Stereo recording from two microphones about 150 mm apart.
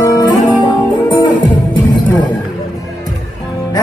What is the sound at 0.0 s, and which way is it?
Music, 25° left (ahead or behind).